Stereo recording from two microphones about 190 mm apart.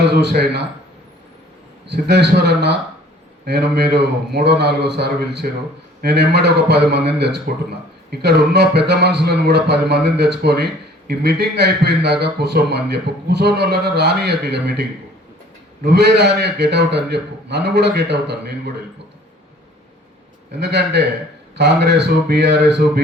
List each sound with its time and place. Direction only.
0.1 s a man's voice: 60° right (ahead or behind)
1.9 s a man's voice: 60° right (ahead or behind)
20.6 s a man's voice: 60° right (ahead or behind)